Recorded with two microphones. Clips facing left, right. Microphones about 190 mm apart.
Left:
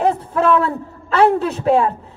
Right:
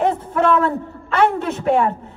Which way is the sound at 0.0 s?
30° left (ahead or behind).